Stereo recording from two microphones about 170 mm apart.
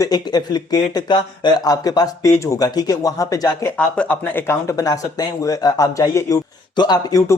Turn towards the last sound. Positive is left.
turn(degrees=20)  # may be behind; listen again after turning